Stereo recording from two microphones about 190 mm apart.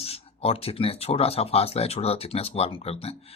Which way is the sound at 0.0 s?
30° left (ahead or behind).